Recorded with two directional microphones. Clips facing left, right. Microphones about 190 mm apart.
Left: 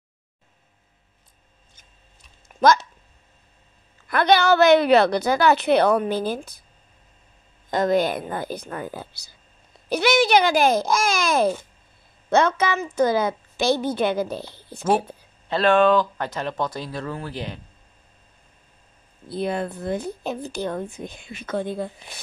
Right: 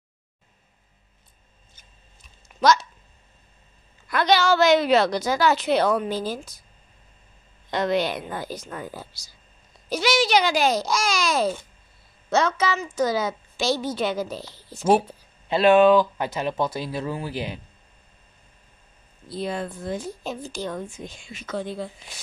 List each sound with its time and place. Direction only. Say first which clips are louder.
2.4 s a sound: left 2 dB; 55° left (ahead or behind)
4.1 s speech: left 2 dB; 55° left (ahead or behind)
7.7 s a woman's voice: left 3 dB; 45° left (ahead or behind)
15.4 s speech: right 2 dB; 10° right (ahead or behind)
19.2 s speech: left 3 dB; 55° left (ahead or behind)